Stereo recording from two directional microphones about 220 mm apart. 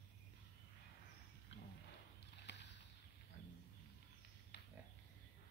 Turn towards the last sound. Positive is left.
turn(degrees=50)  # may be behind; listen again after turning